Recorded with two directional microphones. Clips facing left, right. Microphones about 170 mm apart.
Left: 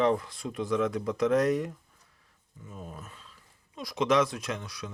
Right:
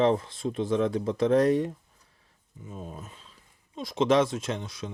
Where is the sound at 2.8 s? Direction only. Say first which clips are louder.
Right 3 dB; 35° right (ahead or behind).